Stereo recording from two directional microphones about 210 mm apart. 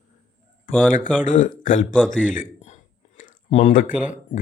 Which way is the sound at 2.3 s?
35° left (ahead or behind).